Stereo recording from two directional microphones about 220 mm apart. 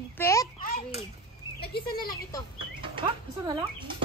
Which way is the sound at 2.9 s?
20° right (ahead or behind).